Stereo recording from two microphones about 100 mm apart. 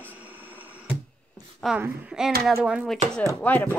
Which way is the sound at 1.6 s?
5° left (ahead or behind).